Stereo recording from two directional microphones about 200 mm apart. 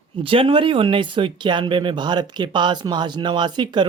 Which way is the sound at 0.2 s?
25° right (ahead or behind).